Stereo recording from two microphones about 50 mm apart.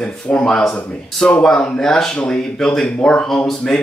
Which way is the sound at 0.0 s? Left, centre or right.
Left.